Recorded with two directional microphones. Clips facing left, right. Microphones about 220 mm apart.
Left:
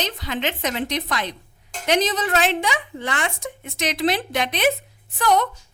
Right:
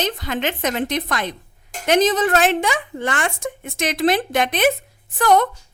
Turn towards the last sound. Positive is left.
turn(degrees=-50)  # may be behind; listen again after turning